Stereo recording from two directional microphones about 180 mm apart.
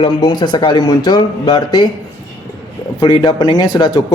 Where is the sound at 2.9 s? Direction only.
25° left (ahead or behind).